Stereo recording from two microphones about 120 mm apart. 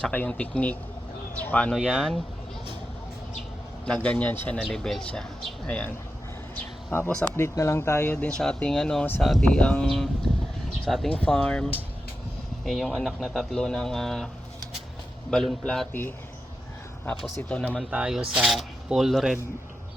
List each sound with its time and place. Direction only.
0.0 s speech: 10° left (ahead or behind)
1.7 s speech: centre (ahead or behind)
3.8 s speech: 10° left (ahead or behind)
6.6 s a sound: 15° left (ahead or behind)
7.3 s speech: 25° left (ahead or behind); by 14.3 s centre (ahead or behind)
15.3 s speech: 5° left (ahead or behind)
15.9 s speech: 15° left (ahead or behind)
17.2 s speech: 5° left (ahead or behind)
17.9 s speech: 5° right (ahead or behind)